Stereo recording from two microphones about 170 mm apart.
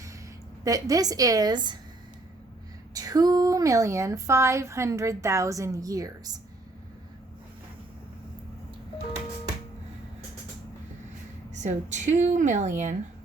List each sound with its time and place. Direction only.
0.6 s speech: 20° right (ahead or behind)
2.9 s speech: 20° right (ahead or behind)
11.5 s a woman's voice: 45° right (ahead or behind)